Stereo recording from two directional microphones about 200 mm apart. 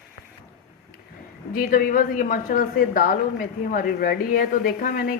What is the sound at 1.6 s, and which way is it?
A woman's voice, 45° left (ahead or behind).